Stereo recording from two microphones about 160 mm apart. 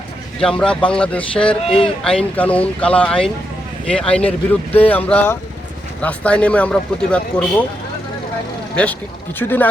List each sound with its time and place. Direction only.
0.3 s speech: 5° left (ahead or behind)
1.6 s speech: 35° left (ahead or behind)
2.0 s speech: 5° left (ahead or behind)
8.7 s speech: 5° left (ahead or behind)